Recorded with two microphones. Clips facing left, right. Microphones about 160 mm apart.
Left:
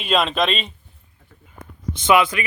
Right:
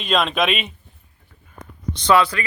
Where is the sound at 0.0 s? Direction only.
5° left (ahead or behind).